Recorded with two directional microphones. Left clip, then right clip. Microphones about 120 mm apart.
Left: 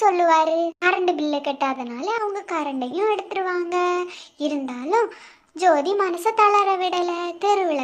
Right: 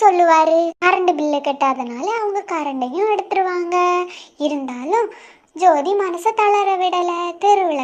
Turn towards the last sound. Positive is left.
turn(degrees=-5)  # may be behind; listen again after turning